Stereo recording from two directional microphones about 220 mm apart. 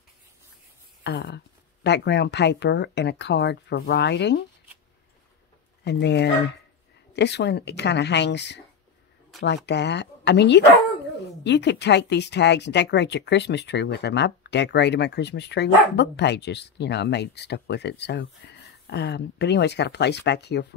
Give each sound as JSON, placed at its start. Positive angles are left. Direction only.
{"t": 1.0, "sound": "speech", "side_deg": 50}
{"t": 5.9, "sound": "speech", "side_deg": 50}
{"t": 9.7, "sound": "speech", "side_deg": 50}